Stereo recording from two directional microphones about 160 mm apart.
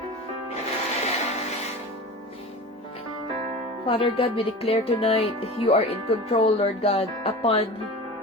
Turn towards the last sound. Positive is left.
turn(degrees=40)  # may be behind; listen again after turning